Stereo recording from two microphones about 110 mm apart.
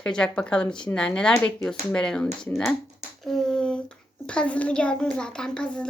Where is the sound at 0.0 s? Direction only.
10° left (ahead or behind).